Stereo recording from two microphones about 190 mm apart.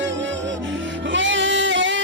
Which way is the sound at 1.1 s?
75° right (ahead or behind).